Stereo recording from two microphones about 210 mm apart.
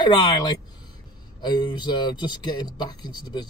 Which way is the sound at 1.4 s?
20° left (ahead or behind).